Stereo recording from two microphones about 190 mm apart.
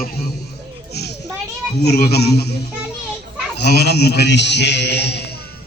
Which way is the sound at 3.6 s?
55° left (ahead or behind).